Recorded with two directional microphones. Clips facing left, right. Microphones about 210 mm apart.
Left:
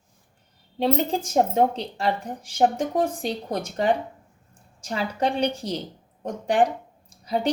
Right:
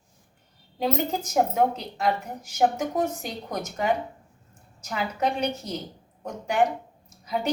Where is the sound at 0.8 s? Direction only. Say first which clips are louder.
Left 3 dB; 30° left (ahead or behind).